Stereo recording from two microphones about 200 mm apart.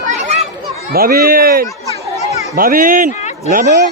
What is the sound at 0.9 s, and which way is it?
Speech, 50° right (ahead or behind).